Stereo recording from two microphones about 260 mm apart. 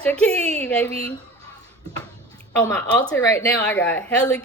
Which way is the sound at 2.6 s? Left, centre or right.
Centre.